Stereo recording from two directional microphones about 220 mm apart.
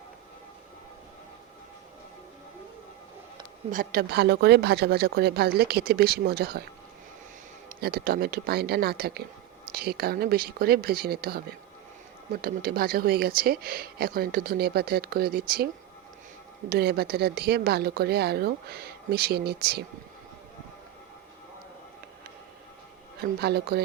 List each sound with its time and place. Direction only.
3.7 s speech: 40° right (ahead or behind)
7.8 s speech: 45° right (ahead or behind)
23.1 s speech: 45° right (ahead or behind)